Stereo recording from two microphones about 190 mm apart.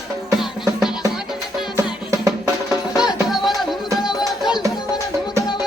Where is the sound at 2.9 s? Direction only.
Centre (ahead or behind).